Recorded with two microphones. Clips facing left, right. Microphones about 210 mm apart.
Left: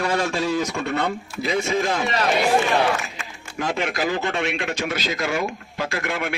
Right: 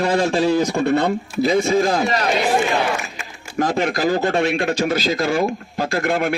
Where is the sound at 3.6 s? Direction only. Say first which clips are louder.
Right 5 dB; 40° right (ahead or behind).